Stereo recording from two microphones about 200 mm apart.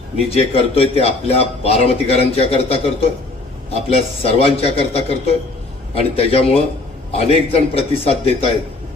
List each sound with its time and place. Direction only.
0.3 s a man's voice: 30° left (ahead or behind)